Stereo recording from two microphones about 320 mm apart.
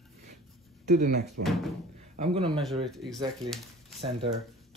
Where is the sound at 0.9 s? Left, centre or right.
Right.